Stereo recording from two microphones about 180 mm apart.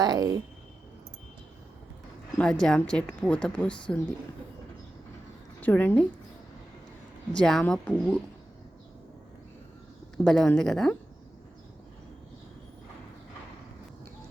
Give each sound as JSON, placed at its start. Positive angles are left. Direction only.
{"t": 0.0, "sound": "a sound", "side_deg": -20}
{"t": 2.4, "sound": "a woman's voice", "side_deg": 5}
{"t": 5.5, "sound": "a woman's voice", "side_deg": 10}
{"t": 7.3, "sound": "a woman's voice", "side_deg": 5}
{"t": 10.2, "sound": "a woman's voice", "side_deg": 5}